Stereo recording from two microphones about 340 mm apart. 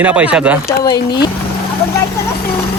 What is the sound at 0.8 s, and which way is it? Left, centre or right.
Speech, centre.